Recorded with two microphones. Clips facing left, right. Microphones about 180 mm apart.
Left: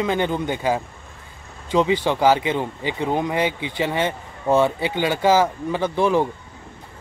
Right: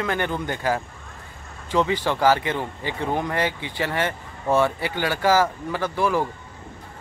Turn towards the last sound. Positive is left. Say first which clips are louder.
# left 4 dB
turn(degrees=20)  # may be behind; listen again after turning